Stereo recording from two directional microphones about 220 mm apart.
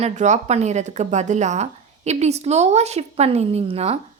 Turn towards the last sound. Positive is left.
turn(degrees=-25)  # may be behind; listen again after turning